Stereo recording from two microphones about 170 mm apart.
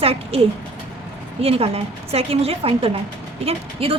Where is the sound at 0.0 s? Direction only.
35° right (ahead or behind).